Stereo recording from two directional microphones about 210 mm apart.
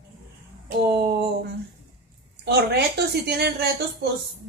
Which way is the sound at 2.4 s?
55° right (ahead or behind).